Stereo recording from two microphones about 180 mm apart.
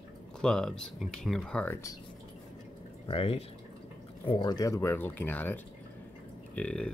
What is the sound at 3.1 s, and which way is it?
Speech, 30° left (ahead or behind).